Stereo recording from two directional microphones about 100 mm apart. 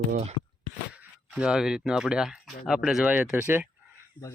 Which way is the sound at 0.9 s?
10° right (ahead or behind).